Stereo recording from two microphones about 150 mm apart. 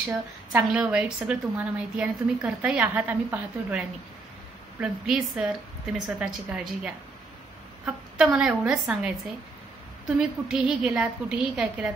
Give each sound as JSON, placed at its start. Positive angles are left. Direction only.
{"t": 0.0, "sound": "a woman's voice", "side_deg": -10}
{"t": 10.1, "sound": "a woman's voice", "side_deg": -5}